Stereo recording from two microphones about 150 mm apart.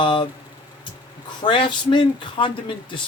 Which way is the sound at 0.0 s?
30° left (ahead or behind).